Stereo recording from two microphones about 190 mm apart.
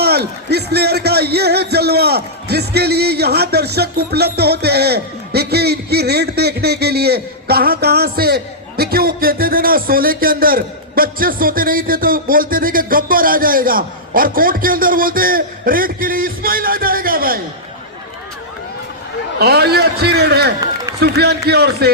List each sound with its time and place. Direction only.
0.0 s a man's voice: 55° right (ahead or behind)
19.4 s a man's voice: 55° right (ahead or behind)